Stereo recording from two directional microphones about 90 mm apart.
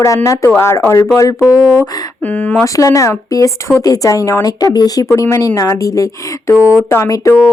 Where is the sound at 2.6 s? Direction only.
40° left (ahead or behind).